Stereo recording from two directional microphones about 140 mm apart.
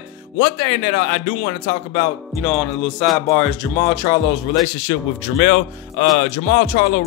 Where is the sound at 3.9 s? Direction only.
25° left (ahead or behind).